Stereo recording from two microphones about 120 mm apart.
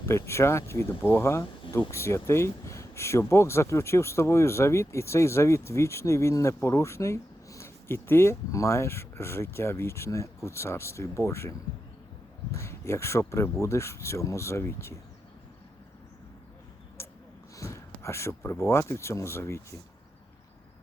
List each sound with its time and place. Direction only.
0.0 s speech: 25° left (ahead or behind)
17.0 s a sound: 20° left (ahead or behind)
17.6 s speech: 25° left (ahead or behind)